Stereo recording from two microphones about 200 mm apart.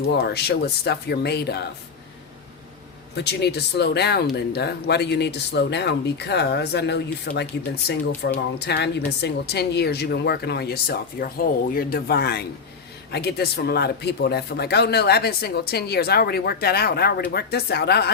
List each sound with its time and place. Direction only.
0.2 s speech: 55° left (ahead or behind)
3.2 s speech: 55° left (ahead or behind)